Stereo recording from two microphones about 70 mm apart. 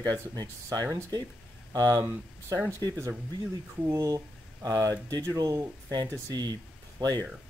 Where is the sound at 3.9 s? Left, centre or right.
Right.